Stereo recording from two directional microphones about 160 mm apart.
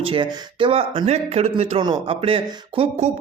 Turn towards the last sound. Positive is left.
turn(degrees=-35)  # may be behind; listen again after turning